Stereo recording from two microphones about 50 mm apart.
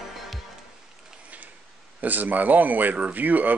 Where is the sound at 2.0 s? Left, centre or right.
Right.